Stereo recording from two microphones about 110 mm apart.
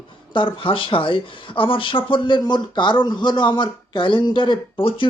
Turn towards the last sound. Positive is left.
turn(degrees=50)  # may be behind; listen again after turning